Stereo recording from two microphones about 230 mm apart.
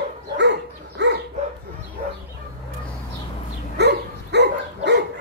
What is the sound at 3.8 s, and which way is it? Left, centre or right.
Dog, right.